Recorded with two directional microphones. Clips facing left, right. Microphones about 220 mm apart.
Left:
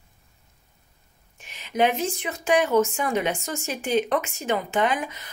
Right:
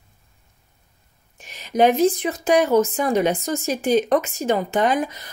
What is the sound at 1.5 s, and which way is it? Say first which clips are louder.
A woman's voice: right 6 dB; 40° right (ahead or behind).